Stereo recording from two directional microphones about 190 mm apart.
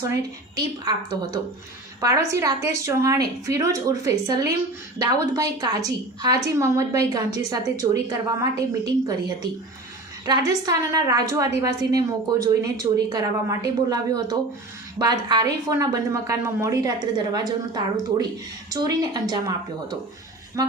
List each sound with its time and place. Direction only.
0.9 s a woman's voice: 20° right (ahead or behind)